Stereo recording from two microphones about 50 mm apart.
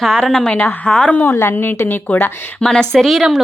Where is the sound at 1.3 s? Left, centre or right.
Left.